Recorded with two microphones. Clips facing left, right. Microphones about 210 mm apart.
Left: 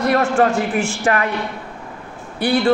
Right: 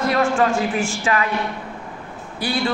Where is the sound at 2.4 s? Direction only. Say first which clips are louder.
Left 7 dB; 60° left (ahead or behind).